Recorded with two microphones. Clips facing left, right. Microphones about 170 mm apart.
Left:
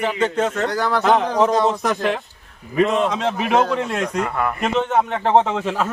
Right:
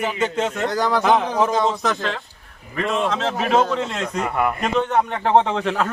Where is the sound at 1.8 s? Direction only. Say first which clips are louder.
Left 3 dB; 15° left (ahead or behind).